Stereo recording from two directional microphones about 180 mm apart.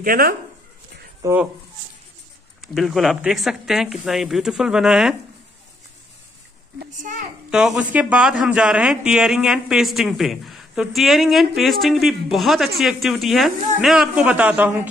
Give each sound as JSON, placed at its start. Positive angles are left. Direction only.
{"t": 0.0, "sound": "speech", "side_deg": -55}
{"t": 1.2, "sound": "speech", "side_deg": -10}
{"t": 2.6, "sound": "a man's voice", "side_deg": 0}
{"t": 7.0, "sound": "speech", "side_deg": -45}
{"t": 7.5, "sound": "a man's voice", "side_deg": -5}